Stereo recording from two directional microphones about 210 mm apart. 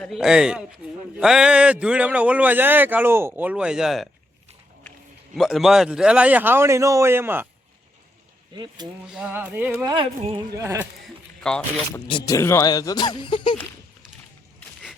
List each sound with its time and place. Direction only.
0.0 s a man's voice: centre (ahead or behind)
5.3 s a man's voice: centre (ahead or behind)
8.5 s a sound: 20° right (ahead or behind)
9.0 s a man's voice: 5° right (ahead or behind)
9.9 s a sound: 25° right (ahead or behind)
10.6 s a man's voice: 15° right (ahead or behind)
11.4 s a man's voice: 5° left (ahead or behind)
11.9 s speech: 20° left (ahead or behind)